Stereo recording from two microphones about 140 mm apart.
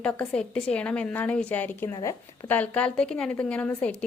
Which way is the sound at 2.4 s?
10° left (ahead or behind).